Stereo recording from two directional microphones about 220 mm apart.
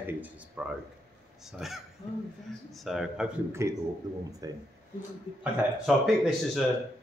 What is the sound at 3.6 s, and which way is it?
Speech, 15° right (ahead or behind).